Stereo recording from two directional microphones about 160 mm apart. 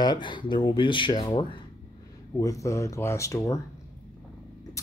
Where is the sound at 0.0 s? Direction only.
25° left (ahead or behind).